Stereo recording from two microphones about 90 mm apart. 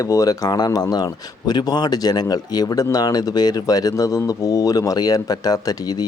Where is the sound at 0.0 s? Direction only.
40° left (ahead or behind).